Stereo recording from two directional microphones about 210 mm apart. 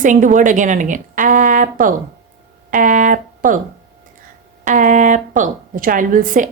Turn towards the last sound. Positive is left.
turn(degrees=-40)  # may be behind; listen again after turning